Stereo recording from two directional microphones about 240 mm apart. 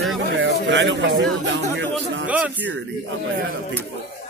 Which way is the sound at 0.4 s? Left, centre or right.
Right.